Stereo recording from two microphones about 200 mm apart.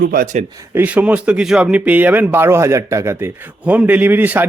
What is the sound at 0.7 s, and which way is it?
Speech, 10° right (ahead or behind).